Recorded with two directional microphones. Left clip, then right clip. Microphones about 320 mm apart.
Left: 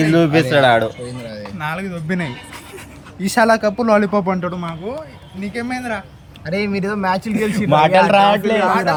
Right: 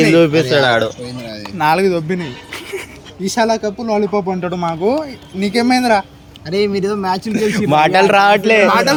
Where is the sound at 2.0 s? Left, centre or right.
Centre.